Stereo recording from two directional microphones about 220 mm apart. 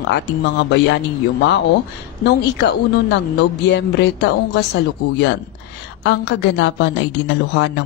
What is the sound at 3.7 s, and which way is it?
A woman's voice, 50° left (ahead or behind).